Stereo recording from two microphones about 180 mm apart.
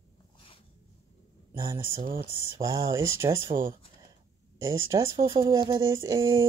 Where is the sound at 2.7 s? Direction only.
15° right (ahead or behind).